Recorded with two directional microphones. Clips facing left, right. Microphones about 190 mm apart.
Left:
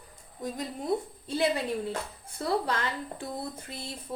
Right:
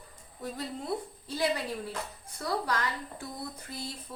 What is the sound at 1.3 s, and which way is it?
A woman's voice, 25° left (ahead or behind).